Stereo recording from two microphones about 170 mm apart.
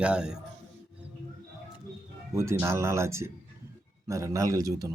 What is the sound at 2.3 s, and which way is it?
Speech, 15° right (ahead or behind).